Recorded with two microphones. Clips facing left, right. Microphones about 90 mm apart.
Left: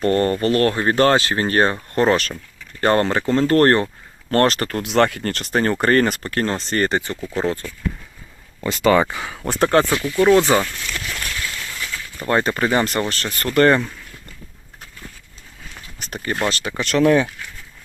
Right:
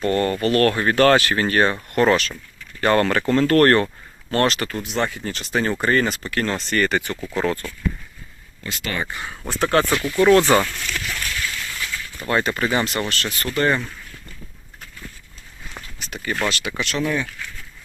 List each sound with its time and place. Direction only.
0.0 s speech: 35° left (ahead or behind)
0.6 s speech: 25° left (ahead or behind)
2.1 s speech: 45° left (ahead or behind)
2.8 s speech: 30° left (ahead or behind)
4.3 s speech: 45° left (ahead or behind)
4.8 s speech: 80° left; by 7.6 s 25° left (ahead or behind)
9.4 s speech: 55° left (ahead or behind)
10.2 s speech: 10° left (ahead or behind)
12.3 s speech: 40° left (ahead or behind); by 13.8 s 60° left (ahead or behind)
16.0 s speech: 45° left (ahead or behind)
17.0 s speech: 65° left (ahead or behind)